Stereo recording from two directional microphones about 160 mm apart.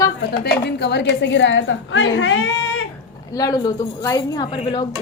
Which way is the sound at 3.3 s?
20° left (ahead or behind).